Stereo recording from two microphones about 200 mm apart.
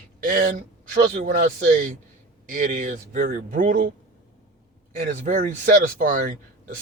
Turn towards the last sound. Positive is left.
turn(degrees=-40)  # may be behind; listen again after turning